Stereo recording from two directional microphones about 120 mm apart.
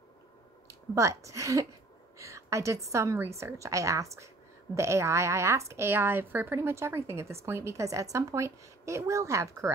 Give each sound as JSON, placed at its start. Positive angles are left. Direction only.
{"t": 0.7, "sound": "a woman's voice", "side_deg": -25}